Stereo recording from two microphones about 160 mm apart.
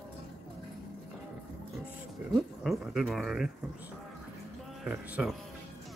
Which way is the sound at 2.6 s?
Centre (ahead or behind).